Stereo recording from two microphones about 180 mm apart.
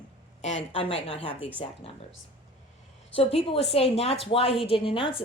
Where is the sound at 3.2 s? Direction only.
35° left (ahead or behind).